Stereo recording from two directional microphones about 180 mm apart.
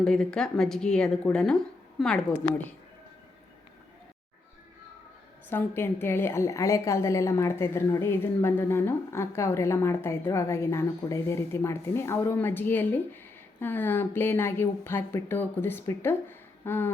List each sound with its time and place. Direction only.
0.0 s a woman's voice: 5° left (ahead or behind)
5.5 s a woman's voice: 10° left (ahead or behind)